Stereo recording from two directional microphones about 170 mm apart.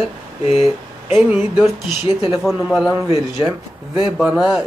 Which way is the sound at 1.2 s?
10° right (ahead or behind).